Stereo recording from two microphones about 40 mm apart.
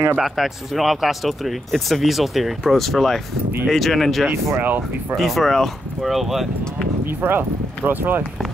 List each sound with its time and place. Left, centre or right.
0.2 s speech: centre
4.6 s speech: right
5.1 s speech: centre
7.1 s speech: right